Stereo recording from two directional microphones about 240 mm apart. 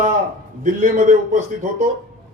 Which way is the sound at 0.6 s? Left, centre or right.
Right.